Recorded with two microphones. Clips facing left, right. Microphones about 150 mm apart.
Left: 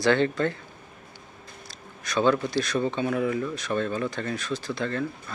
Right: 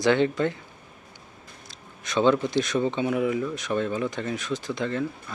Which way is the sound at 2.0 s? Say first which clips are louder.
Right 2 dB; 20° right (ahead or behind).